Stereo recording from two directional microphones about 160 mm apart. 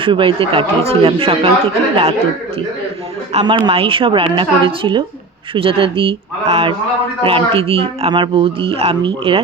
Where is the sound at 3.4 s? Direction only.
30° right (ahead or behind).